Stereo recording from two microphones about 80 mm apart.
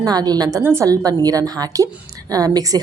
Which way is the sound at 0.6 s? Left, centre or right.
Right.